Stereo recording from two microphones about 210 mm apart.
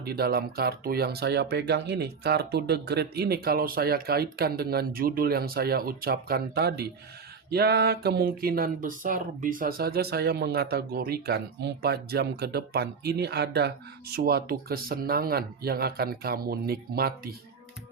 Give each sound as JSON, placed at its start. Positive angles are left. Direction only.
{"t": 0.0, "sound": "speech", "side_deg": -45}